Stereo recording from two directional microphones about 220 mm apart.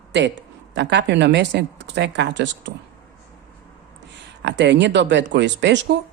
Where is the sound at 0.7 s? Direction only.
50° right (ahead or behind).